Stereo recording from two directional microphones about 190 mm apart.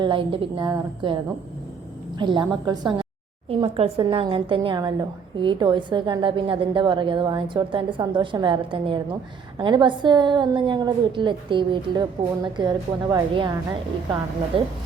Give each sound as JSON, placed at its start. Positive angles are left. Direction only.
{"t": 0.0, "sound": "a woman's voice", "side_deg": -25}